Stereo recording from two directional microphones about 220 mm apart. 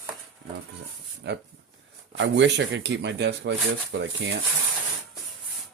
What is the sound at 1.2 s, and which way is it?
Speech, 50° right (ahead or behind).